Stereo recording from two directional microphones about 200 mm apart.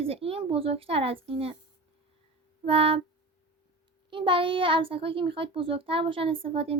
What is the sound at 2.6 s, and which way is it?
Speech, 30° right (ahead or behind).